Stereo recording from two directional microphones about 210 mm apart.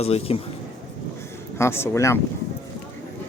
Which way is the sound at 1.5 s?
10° left (ahead or behind).